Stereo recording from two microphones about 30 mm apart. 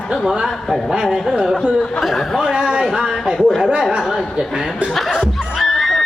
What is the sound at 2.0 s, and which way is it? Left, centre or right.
Speech, centre.